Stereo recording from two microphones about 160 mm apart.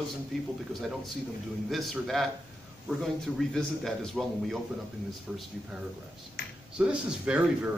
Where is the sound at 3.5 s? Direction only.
Centre (ahead or behind).